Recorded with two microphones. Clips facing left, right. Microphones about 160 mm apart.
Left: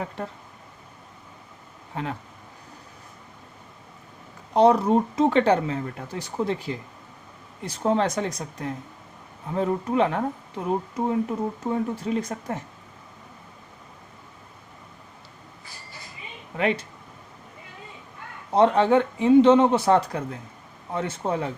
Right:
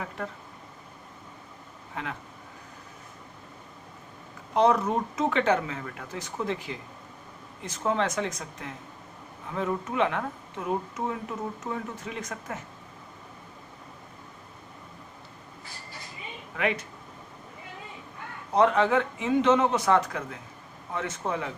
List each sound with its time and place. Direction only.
2.0 s speech: 35° left (ahead or behind)
4.5 s speech: 30° left (ahead or behind)
16.6 s speech: 30° left (ahead or behind)
18.5 s speech: 30° left (ahead or behind)